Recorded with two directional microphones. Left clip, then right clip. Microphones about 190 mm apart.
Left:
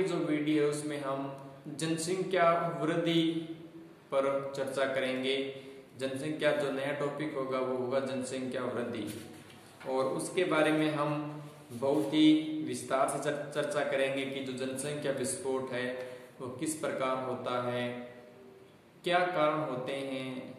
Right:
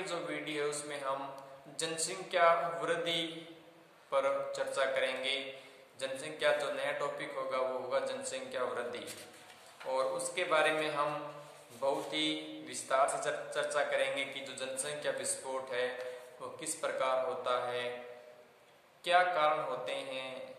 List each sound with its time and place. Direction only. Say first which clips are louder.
0.0 s a man's voice: left 7 dB; 15° right (ahead or behind)
19.0 s a man's voice: even; 15° right (ahead or behind)